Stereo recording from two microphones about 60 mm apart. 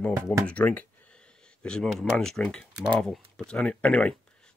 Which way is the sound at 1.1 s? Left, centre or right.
Centre.